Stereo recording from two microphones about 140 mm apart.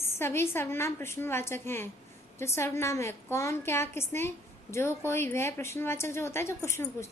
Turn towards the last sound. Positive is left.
turn(degrees=20)  # may be behind; listen again after turning